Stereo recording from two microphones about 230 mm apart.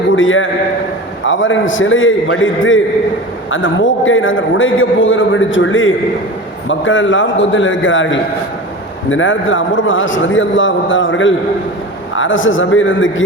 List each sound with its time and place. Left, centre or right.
0.2 s a man's voice: left